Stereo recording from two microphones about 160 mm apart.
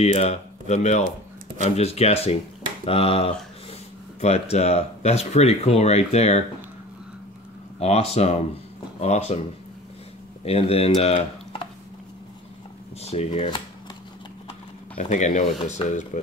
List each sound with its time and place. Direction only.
0.0 s speech: 45° left (ahead or behind)
7.8 s speech: 40° left (ahead or behind)
10.4 s speech: 40° left (ahead or behind)
13.0 s speech: 40° left (ahead or behind)
15.0 s speech: 50° left (ahead or behind)
15.8 s speech: 30° left (ahead or behind)